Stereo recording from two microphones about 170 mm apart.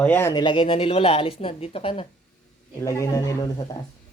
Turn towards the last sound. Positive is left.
turn(degrees=20)  # may be behind; listen again after turning